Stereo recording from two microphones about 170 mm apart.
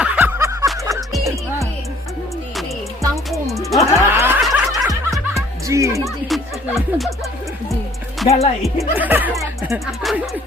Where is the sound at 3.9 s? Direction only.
15° right (ahead or behind).